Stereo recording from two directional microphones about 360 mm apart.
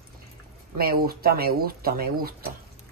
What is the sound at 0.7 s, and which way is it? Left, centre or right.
Speech, right.